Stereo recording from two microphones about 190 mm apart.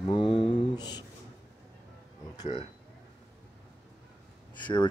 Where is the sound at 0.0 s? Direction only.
25° left (ahead or behind).